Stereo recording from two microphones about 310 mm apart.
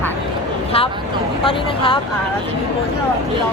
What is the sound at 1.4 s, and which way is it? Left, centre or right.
Speech, centre.